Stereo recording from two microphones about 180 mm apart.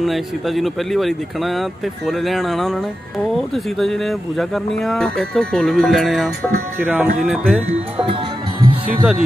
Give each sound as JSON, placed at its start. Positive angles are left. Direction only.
{"t": 0.0, "sound": "speech", "side_deg": 0}
{"t": 8.1, "sound": "music", "side_deg": -30}
{"t": 8.8, "sound": "speech", "side_deg": -5}